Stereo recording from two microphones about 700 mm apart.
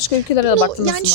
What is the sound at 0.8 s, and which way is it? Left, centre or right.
Speech, right.